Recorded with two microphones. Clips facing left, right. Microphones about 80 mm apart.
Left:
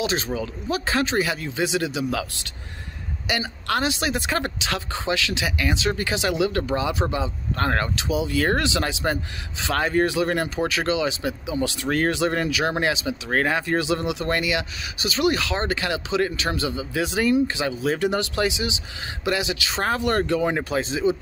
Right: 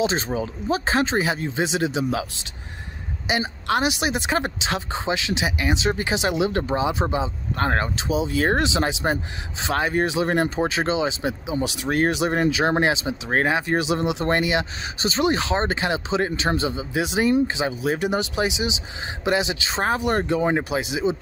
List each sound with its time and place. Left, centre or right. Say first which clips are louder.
0.0 s speech: right 2 dB; right